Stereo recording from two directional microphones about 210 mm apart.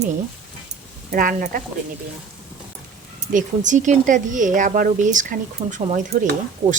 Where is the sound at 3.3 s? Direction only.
35° right (ahead or behind).